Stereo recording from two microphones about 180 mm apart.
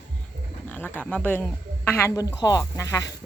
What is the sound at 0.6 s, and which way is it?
A woman's voice, 10° left (ahead or behind).